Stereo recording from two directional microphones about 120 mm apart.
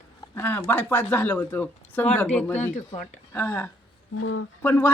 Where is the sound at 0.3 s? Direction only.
15° left (ahead or behind).